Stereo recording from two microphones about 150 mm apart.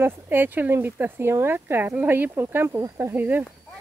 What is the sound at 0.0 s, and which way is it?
Speech, 15° right (ahead or behind).